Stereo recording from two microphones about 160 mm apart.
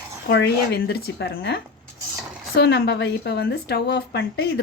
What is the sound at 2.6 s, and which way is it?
Speech, 90° left.